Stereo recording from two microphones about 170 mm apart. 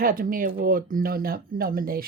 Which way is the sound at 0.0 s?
55° right (ahead or behind).